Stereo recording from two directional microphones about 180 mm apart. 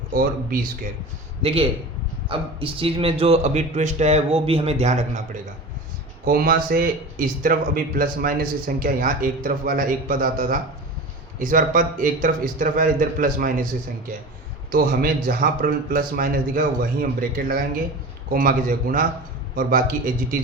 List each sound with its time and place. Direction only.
0.1 s speech: 55° right (ahead or behind)
1.4 s a man's voice: 35° right (ahead or behind)
6.2 s speech: 55° right (ahead or behind)
14.7 s speech: 55° right (ahead or behind)